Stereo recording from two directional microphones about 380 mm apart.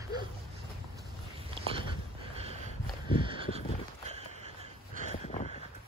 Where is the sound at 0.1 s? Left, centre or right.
Centre.